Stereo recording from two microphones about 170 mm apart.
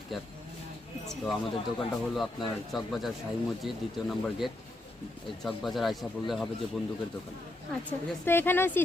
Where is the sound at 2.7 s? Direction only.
Centre (ahead or behind).